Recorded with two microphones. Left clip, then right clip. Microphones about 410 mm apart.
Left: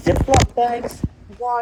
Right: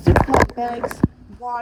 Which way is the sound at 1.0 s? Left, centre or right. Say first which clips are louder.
Right 9 dB; right.